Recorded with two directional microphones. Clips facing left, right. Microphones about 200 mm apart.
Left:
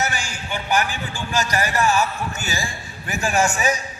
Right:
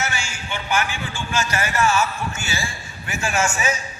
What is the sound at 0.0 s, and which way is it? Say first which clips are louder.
A man's voice: left 2 dB; 40° left (ahead or behind).